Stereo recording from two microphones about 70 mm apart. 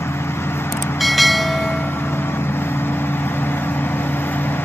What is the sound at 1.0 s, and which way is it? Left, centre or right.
Train, centre.